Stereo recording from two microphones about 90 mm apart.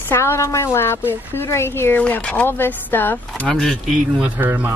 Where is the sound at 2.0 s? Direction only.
15° left (ahead or behind).